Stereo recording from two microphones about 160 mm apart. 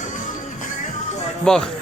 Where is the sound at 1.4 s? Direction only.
5° left (ahead or behind).